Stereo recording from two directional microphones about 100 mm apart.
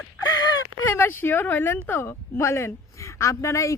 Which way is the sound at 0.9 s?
20° left (ahead or behind).